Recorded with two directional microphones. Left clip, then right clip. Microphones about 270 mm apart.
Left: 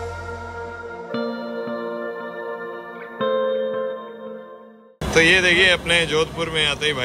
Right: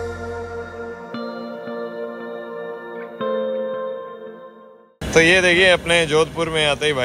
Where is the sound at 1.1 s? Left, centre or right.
Centre.